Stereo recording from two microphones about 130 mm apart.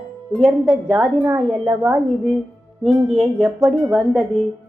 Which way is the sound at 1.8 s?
Centre (ahead or behind).